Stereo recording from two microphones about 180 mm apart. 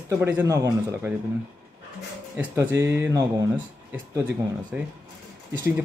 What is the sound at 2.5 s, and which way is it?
Speech, 15° right (ahead or behind).